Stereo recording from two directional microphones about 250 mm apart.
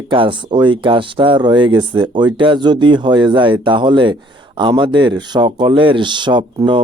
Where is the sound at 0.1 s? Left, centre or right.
Centre.